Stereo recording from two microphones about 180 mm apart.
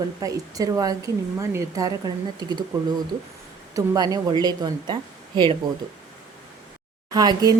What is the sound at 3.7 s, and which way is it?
Speech, 20° right (ahead or behind).